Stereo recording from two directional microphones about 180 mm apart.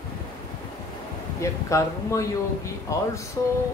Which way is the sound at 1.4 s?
15° left (ahead or behind).